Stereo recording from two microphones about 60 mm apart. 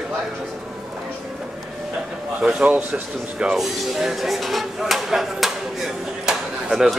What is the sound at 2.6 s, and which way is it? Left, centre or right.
Speech, right.